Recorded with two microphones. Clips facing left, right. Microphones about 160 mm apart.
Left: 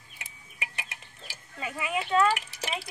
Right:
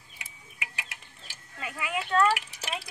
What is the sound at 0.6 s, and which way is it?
Chicken, 30° left (ahead or behind).